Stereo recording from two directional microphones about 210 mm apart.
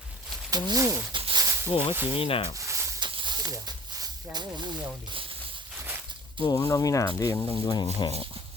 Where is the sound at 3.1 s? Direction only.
25° right (ahead or behind).